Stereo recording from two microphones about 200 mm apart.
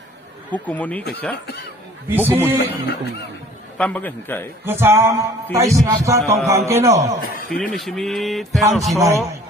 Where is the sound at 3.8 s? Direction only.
10° left (ahead or behind).